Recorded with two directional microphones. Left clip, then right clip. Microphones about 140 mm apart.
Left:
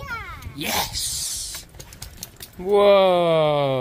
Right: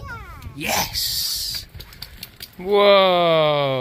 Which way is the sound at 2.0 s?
80° left.